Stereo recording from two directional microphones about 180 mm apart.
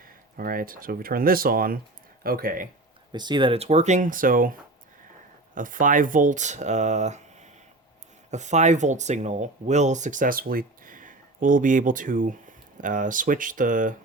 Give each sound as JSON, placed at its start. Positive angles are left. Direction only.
{"t": 0.3, "sound": "speech", "side_deg": -55}
{"t": 3.1, "sound": "speech", "side_deg": -25}
{"t": 5.5, "sound": "speech", "side_deg": -50}